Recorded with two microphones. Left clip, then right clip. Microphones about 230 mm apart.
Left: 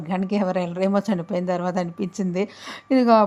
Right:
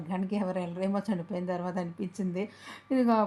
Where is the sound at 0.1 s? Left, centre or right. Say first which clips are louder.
Left 9 dB; left.